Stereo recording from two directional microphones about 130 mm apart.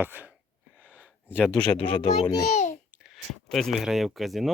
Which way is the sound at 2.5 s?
65° left (ahead or behind).